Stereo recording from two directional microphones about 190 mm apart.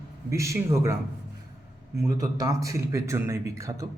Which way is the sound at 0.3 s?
15° right (ahead or behind).